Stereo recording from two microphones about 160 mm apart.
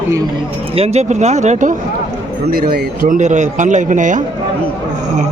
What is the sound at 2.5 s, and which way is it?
A man's voice, 70° right (ahead or behind).